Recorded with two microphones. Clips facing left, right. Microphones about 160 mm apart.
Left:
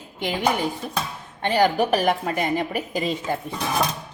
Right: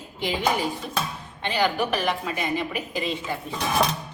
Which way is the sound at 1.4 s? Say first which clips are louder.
Left 5 dB; 45° left (ahead or behind).